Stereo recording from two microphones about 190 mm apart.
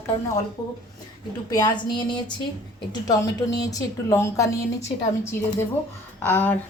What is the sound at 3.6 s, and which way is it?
Speech, 20° left (ahead or behind).